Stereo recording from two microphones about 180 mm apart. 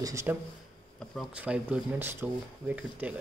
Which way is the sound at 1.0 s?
Centre (ahead or behind).